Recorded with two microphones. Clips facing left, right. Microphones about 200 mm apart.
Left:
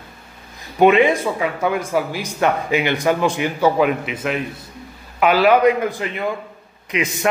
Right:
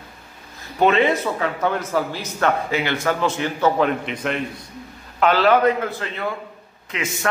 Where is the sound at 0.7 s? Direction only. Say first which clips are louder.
Left 4 dB; 15° left (ahead or behind).